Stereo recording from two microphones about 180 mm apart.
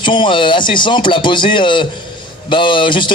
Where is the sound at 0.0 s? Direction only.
25° left (ahead or behind).